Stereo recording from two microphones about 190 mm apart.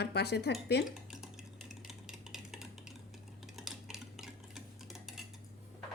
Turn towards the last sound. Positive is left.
turn(degrees=0)  # may be behind; listen again after turning